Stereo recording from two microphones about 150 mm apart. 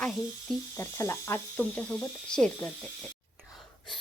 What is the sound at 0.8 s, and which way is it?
Speech, 15° left (ahead or behind).